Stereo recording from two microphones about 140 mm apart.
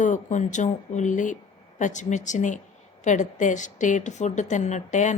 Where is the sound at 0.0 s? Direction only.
60° left (ahead or behind).